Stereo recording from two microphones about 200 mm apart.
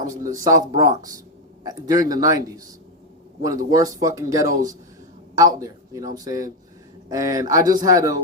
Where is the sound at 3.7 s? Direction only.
15° right (ahead or behind).